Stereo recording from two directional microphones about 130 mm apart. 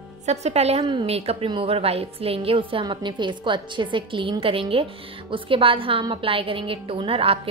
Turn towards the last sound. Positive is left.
turn(degrees=-45)  # may be behind; listen again after turning